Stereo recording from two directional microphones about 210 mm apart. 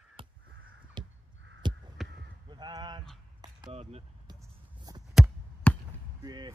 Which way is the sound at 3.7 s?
30° right (ahead or behind).